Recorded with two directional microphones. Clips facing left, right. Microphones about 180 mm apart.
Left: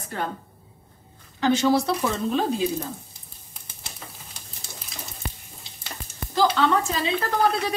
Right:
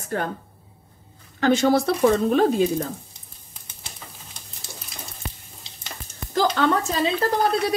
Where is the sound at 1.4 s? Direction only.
55° right (ahead or behind).